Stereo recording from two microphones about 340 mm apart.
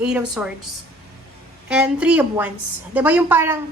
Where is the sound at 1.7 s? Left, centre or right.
Centre.